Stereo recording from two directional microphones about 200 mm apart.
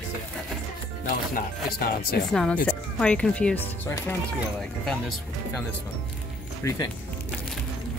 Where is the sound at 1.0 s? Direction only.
45° left (ahead or behind).